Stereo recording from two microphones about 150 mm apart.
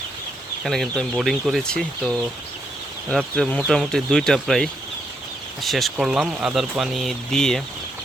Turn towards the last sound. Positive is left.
turn(degrees=5)  # may be behind; listen again after turning